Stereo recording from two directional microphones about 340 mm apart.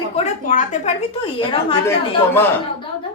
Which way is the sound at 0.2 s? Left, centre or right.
Left.